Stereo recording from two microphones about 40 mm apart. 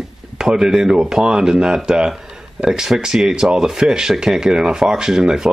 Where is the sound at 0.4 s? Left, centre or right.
Centre.